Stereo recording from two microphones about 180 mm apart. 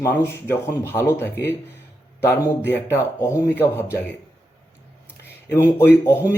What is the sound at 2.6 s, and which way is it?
A man's voice, 15° left (ahead or behind).